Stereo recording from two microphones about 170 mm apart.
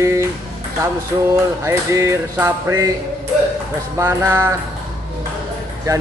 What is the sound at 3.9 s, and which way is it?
Speech, 15° right (ahead or behind).